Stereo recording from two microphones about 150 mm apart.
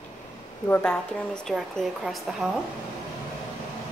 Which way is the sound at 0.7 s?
5° left (ahead or behind).